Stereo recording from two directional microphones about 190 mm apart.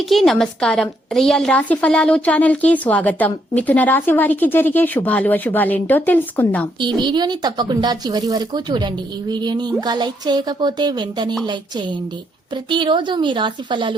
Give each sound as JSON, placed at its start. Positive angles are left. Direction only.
{"t": 0.1, "sound": "a woman's voice", "side_deg": 0}
{"t": 6.7, "sound": "a woman's voice", "side_deg": -25}